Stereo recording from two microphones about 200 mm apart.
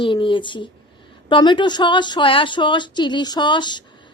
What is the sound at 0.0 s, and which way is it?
A woman's voice, 25° left (ahead or behind).